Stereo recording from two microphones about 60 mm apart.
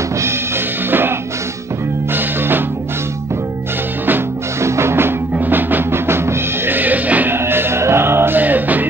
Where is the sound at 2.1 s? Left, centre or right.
Right.